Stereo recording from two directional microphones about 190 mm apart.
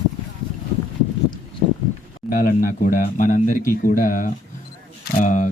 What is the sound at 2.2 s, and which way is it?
Speech, 50° left (ahead or behind).